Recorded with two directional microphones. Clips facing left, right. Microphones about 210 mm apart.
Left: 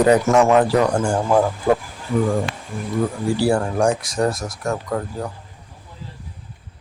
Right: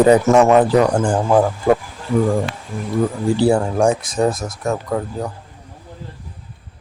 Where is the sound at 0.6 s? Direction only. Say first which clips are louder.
Right 3 dB; 5° right (ahead or behind).